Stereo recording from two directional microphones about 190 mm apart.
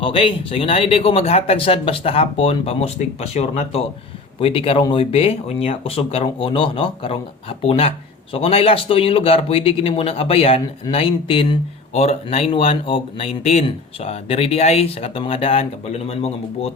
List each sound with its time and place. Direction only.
0.0 s speech: 30° left (ahead or behind)